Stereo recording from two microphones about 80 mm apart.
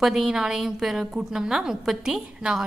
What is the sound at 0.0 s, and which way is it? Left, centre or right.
A woman's voice, centre.